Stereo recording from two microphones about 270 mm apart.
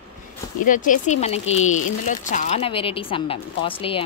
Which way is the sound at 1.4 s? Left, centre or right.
Left.